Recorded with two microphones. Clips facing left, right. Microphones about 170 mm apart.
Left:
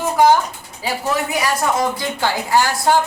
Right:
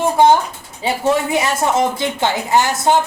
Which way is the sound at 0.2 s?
25° right (ahead or behind).